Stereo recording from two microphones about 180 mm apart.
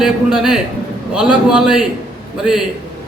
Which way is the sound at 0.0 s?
5° right (ahead or behind).